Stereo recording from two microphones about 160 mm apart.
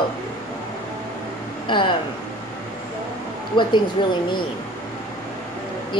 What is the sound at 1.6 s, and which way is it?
Speech, 30° left (ahead or behind).